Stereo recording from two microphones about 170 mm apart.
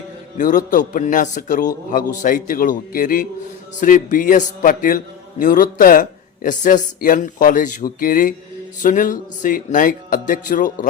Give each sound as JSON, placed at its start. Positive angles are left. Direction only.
{"t": 0.3, "sound": "a man's voice", "side_deg": 50}